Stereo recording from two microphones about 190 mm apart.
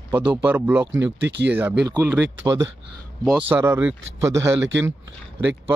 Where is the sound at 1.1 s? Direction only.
65° right (ahead or behind).